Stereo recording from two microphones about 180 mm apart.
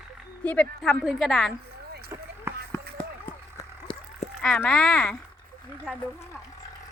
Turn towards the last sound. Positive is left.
turn(degrees=0)  # may be behind; listen again after turning